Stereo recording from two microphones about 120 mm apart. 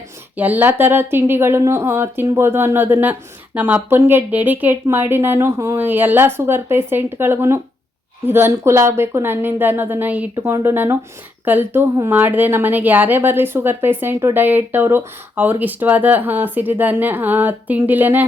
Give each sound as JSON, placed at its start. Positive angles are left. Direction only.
{"t": 0.3, "sound": "a woman's voice", "side_deg": -15}